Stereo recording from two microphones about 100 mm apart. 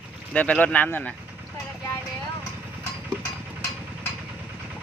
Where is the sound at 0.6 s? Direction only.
15° left (ahead or behind).